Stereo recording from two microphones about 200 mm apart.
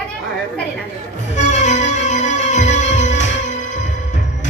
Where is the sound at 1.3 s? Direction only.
35° left (ahead or behind).